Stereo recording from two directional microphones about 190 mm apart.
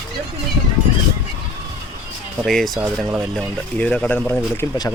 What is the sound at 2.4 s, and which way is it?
Speech, centre (ahead or behind).